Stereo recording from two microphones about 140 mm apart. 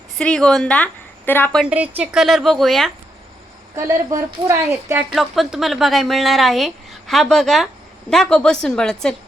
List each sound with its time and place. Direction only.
0.2 s a woman's voice: 5° left (ahead or behind)
1.7 s speech: 10° right (ahead or behind)
2.2 s speech: centre (ahead or behind)
3.8 s a woman's voice: 20° right (ahead or behind)
5.1 s speech: centre (ahead or behind)